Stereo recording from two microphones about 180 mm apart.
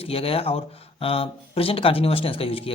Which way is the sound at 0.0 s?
30° left (ahead or behind).